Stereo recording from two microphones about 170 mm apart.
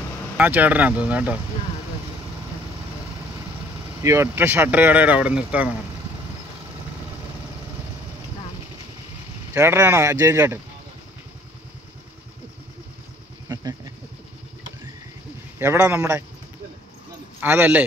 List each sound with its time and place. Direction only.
0.4 s speech: 10° right (ahead or behind)
4.0 s speech: 15° right (ahead or behind)
9.5 s speech: 15° right (ahead or behind)
13.5 s a sound: 20° right (ahead or behind)
15.6 s speech: 15° right (ahead or behind)
17.4 s speech: 10° right (ahead or behind)